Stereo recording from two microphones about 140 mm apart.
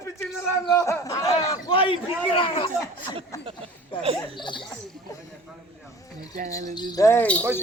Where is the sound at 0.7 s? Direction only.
25° left (ahead or behind).